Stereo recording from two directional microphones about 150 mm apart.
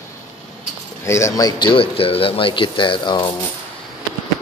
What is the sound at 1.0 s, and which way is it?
Speech, 20° left (ahead or behind).